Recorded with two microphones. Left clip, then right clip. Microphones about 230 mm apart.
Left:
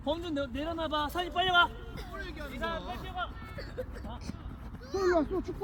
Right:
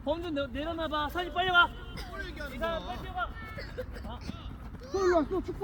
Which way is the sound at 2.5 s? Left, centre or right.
Left.